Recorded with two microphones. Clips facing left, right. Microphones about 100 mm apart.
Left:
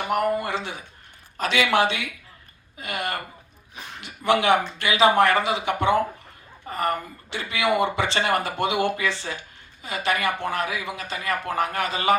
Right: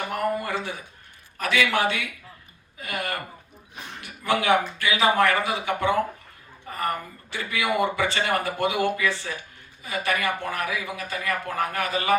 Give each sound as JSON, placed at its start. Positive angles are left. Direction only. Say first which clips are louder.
{"t": 0.0, "sound": "speech", "louder": "left 3 dB", "side_deg": 20}